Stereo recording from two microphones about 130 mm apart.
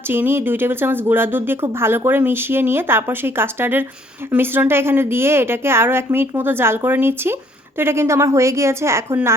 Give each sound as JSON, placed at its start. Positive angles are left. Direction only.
{"t": 0.1, "sound": "a woman's voice", "side_deg": -15}